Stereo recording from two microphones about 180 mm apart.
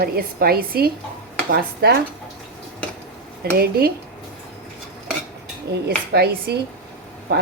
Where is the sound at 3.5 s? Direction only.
60° right (ahead or behind).